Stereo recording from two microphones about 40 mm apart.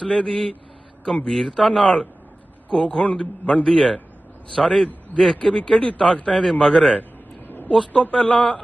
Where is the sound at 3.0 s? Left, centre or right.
Left.